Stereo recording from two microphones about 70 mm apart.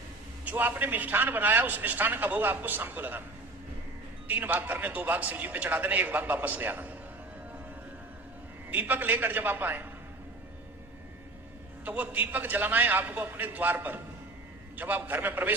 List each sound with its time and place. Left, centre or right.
0.4 s a man's voice: right
4.3 s a man's voice: right
8.7 s a man's voice: right
11.9 s a man's voice: right